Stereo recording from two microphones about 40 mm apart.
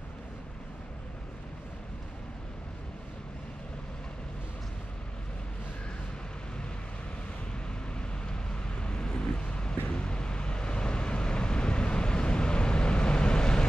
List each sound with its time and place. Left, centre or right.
7.9 s vehicle: left